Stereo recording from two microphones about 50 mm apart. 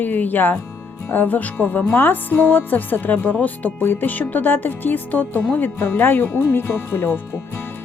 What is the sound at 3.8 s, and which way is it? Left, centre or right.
Speech, left.